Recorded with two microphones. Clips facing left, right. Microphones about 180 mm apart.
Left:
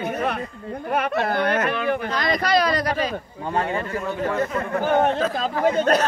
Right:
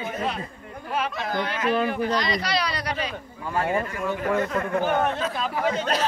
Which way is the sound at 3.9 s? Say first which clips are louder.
Even; 30° left (ahead or behind).